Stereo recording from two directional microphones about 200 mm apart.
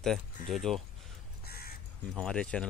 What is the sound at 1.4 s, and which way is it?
Crow, 50° left (ahead or behind).